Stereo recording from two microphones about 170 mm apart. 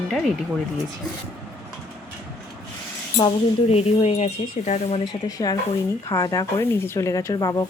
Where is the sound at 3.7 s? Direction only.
40° left (ahead or behind).